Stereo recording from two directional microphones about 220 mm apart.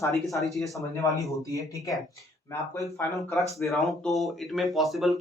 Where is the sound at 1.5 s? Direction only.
15° left (ahead or behind).